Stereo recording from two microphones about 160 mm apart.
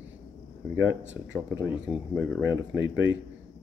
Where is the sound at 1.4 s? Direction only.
15° right (ahead or behind).